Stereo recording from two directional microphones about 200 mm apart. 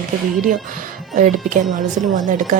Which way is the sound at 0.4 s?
40° right (ahead or behind).